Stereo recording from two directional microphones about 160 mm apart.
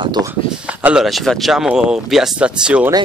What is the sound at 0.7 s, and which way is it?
Speech, 10° right (ahead or behind).